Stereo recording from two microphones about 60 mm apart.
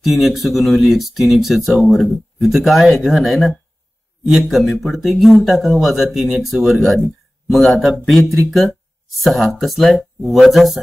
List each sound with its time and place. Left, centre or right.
0.0 s speech: centre